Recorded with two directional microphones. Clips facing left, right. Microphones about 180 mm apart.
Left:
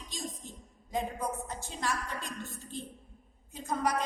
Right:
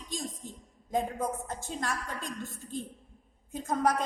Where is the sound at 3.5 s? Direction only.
50° right (ahead or behind).